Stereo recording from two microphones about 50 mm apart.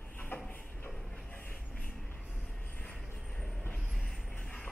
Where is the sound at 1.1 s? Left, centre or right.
Left.